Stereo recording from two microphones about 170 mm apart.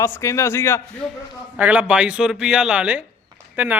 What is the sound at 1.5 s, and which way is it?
Speech, 10° right (ahead or behind).